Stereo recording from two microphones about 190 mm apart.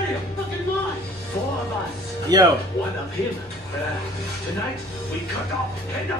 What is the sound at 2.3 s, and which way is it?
Speech, 20° right (ahead or behind).